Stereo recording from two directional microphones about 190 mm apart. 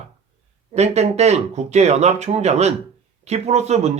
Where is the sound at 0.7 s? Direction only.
35° right (ahead or behind).